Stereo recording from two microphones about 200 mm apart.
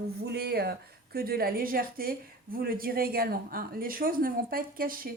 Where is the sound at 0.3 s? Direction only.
50° right (ahead or behind).